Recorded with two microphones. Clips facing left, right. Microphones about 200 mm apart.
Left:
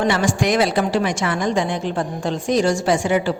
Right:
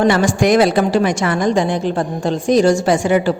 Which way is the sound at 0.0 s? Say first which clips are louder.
Right 5 dB; 45° right (ahead or behind).